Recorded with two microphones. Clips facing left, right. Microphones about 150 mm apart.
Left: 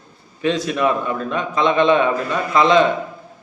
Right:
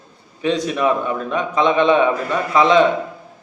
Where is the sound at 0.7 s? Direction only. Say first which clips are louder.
Right 1 dB; 10° right (ahead or behind).